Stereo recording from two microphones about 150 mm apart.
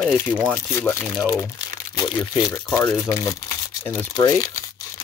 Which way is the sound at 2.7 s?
10° left (ahead or behind).